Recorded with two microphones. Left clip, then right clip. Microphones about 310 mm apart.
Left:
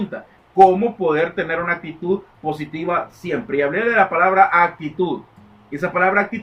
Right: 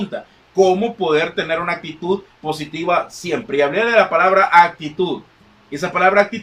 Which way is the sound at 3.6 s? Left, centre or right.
Centre.